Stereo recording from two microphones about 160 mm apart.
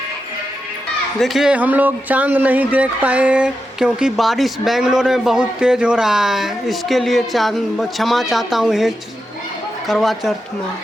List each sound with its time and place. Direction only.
1.2 s speech: centre (ahead or behind)